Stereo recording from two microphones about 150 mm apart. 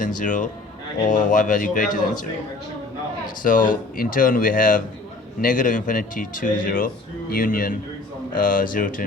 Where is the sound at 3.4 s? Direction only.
65° left (ahead or behind).